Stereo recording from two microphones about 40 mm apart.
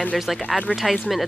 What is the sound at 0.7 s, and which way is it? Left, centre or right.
Speech, left.